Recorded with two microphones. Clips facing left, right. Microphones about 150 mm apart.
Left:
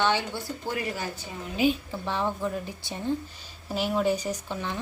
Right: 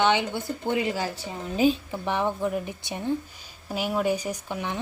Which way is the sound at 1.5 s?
40° right (ahead or behind).